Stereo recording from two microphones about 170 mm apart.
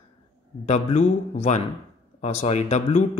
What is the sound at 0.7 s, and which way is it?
A man's voice, 45° left (ahead or behind).